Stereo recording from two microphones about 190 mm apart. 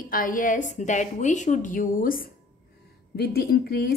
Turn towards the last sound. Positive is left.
turn(degrees=55)  # may be behind; listen again after turning